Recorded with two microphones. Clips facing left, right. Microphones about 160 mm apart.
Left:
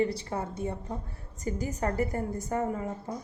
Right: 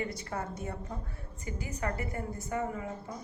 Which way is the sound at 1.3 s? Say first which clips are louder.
Left 6 dB; 40° left (ahead or behind).